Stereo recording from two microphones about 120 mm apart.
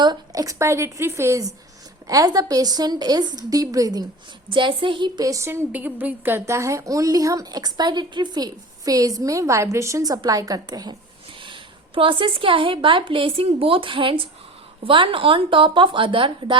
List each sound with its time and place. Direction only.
0.0 s a woman's voice: 35° right (ahead or behind)
4.4 s a woman's voice: 45° right (ahead or behind)
11.3 s a woman's voice: 45° right (ahead or behind)